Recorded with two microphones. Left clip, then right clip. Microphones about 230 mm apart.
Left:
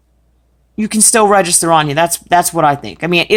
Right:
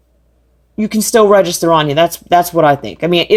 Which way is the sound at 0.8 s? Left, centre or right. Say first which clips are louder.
Right 1 dB; centre.